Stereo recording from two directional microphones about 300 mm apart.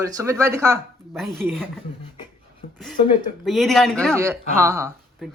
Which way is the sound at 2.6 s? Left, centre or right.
Left.